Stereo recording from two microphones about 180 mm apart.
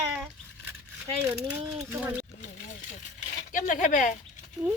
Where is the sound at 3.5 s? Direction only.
45° left (ahead or behind).